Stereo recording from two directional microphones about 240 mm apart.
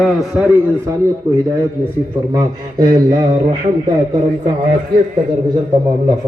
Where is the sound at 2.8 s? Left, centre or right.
Centre.